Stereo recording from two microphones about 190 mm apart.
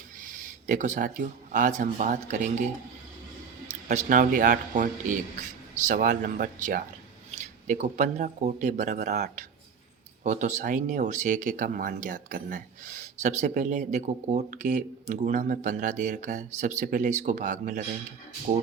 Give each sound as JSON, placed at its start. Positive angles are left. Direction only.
{"t": 0.2, "sound": "speech", "side_deg": -45}
{"t": 3.7, "sound": "speech", "side_deg": -40}
{"t": 10.2, "sound": "speech", "side_deg": -40}